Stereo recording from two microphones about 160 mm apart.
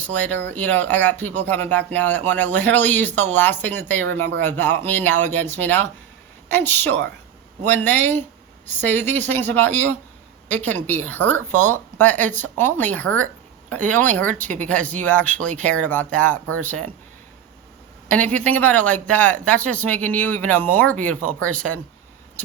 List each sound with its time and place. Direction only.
0.2 s speech: 10° left (ahead or behind)
18.1 s speech: 10° left (ahead or behind)